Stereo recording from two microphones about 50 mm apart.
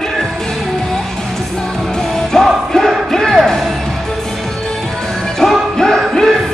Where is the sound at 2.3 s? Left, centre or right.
Centre.